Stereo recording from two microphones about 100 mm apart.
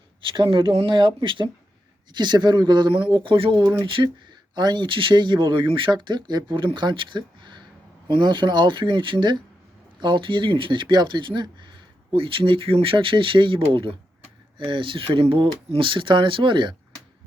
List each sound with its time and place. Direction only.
0.3 s speech: 55° right (ahead or behind)